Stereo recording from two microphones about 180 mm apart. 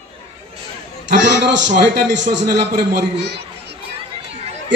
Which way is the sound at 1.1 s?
80° right.